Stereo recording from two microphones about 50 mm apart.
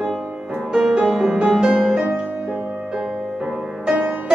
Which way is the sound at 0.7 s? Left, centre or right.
Centre.